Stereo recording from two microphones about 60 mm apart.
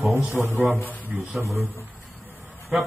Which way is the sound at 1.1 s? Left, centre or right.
Centre.